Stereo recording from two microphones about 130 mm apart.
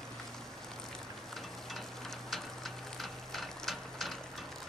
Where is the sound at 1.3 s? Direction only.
Centre (ahead or behind).